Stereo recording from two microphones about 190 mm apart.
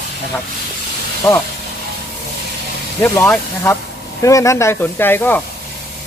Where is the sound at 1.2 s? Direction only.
15° left (ahead or behind).